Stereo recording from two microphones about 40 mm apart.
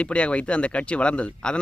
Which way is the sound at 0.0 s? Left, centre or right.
Left.